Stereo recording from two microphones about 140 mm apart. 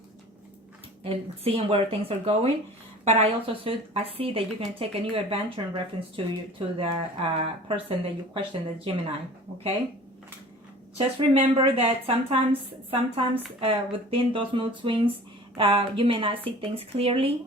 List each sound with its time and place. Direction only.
1.0 s a woman's voice: 45° right (ahead or behind)
10.9 s a woman's voice: 40° right (ahead or behind)